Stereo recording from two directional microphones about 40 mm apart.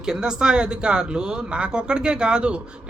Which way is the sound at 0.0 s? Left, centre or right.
Centre.